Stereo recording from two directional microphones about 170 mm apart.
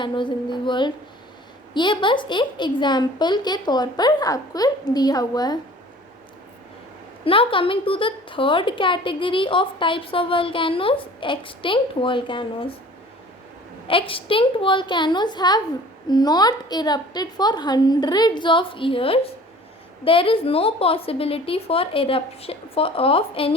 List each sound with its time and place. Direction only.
0.0 s speech: 30° left (ahead or behind)
7.3 s a woman's voice: 30° left (ahead or behind)
13.8 s a woman's voice: 30° left (ahead or behind)